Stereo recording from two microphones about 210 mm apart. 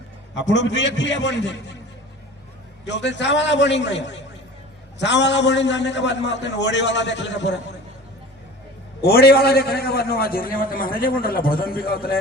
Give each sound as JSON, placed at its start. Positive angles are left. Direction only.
{"t": 0.3, "sound": "a man's voice", "side_deg": 60}
{"t": 2.8, "sound": "a man's voice", "side_deg": 55}
{"t": 9.0, "sound": "a man's voice", "side_deg": 50}